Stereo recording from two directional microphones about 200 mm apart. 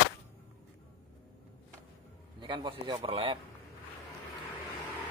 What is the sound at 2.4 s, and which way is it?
Speech, 25° right (ahead or behind).